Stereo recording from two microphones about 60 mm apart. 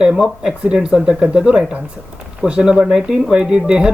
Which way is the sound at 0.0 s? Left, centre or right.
Centre.